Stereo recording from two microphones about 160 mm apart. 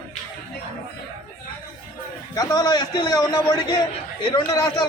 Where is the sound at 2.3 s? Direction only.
25° left (ahead or behind).